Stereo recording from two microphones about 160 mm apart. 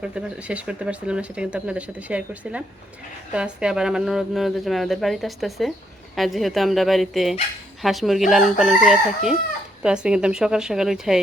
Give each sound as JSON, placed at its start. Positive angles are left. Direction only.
{"t": 0.0, "sound": "a woman's voice", "side_deg": -5}